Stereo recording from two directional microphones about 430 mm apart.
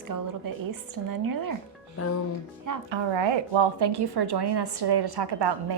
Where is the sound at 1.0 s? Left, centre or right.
Right.